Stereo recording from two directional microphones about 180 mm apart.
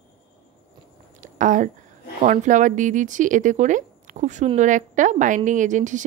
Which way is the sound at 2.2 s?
45° right (ahead or behind).